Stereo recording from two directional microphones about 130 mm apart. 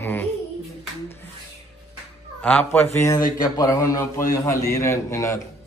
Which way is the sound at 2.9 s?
25° left (ahead or behind).